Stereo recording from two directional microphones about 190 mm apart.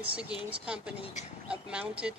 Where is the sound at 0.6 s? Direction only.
5° right (ahead or behind).